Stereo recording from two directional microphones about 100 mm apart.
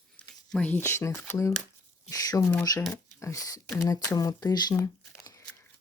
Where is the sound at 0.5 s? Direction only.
15° left (ahead or behind); by 4.7 s 40° left (ahead or behind).